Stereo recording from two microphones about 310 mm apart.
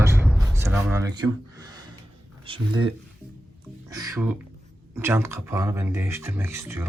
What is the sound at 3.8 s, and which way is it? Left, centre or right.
Music, centre.